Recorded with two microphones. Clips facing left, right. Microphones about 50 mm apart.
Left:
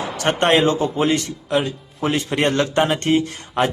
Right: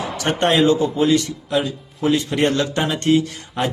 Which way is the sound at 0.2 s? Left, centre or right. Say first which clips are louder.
Left 1 dB; left.